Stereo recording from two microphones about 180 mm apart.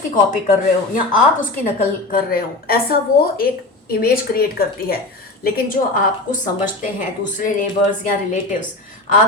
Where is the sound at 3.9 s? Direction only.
55° left (ahead or behind).